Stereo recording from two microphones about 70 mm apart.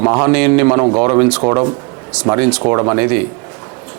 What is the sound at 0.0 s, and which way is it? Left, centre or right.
A man's voice, right.